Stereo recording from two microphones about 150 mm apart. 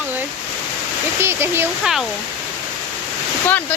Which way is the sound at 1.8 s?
5° right (ahead or behind).